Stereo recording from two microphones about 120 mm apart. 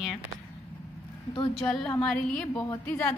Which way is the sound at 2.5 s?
30° left (ahead or behind).